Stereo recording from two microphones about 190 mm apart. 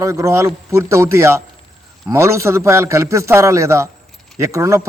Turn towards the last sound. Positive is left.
turn(degrees=-15)  # may be behind; listen again after turning